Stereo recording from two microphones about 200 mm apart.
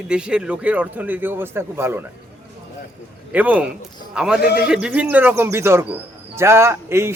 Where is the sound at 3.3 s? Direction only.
5° right (ahead or behind).